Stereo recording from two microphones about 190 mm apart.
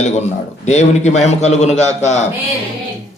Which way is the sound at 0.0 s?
35° left (ahead or behind).